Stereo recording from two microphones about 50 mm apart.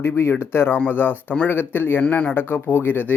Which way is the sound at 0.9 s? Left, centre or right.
Left.